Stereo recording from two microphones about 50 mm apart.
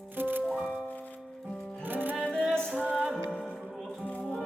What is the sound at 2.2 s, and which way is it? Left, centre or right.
Music, left.